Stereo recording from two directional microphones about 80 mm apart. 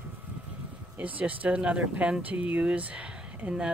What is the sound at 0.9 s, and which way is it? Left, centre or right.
Speech, centre.